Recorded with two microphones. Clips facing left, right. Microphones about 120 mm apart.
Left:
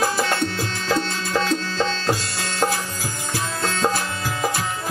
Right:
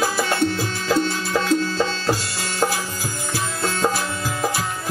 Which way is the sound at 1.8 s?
10° right (ahead or behind).